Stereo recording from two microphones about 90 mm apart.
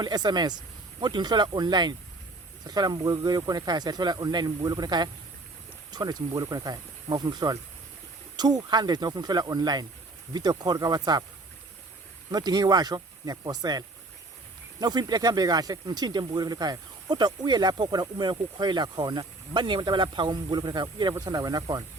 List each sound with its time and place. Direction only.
0.0 s speech: 50° right (ahead or behind)
12.3 s speech: 50° right (ahead or behind)